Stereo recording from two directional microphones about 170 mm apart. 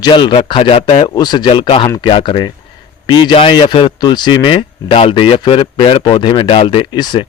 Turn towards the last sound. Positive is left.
turn(degrees=25)  # may be behind; listen again after turning